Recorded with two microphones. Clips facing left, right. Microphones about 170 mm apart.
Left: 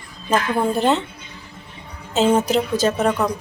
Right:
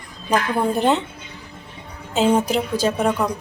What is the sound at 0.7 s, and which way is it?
Speech, 15° right (ahead or behind).